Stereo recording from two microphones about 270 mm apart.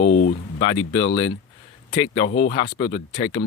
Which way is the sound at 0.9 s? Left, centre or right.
Centre.